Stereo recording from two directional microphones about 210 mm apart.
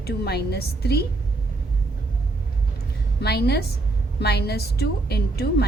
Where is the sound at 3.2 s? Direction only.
50° left (ahead or behind).